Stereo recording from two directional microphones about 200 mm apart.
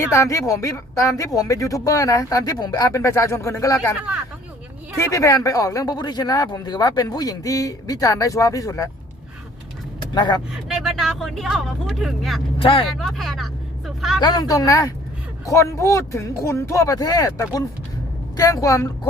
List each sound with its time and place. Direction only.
0.1 s speech: 15° left (ahead or behind)
4.9 s speech: 15° left (ahead or behind)
10.2 s speech: 20° left (ahead or behind)
10.7 s speech: centre (ahead or behind)
12.5 s speech: 25° left (ahead or behind)
13.0 s vehicle: centre (ahead or behind)
14.2 s speech: 20° left (ahead or behind)